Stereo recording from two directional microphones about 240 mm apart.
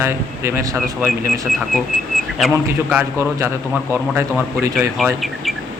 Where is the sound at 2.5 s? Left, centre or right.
Centre.